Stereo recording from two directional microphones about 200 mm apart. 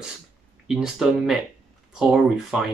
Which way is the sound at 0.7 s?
5° right (ahead or behind).